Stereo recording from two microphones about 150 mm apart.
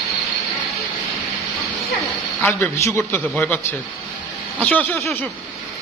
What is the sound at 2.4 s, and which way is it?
A man's voice, 10° left (ahead or behind).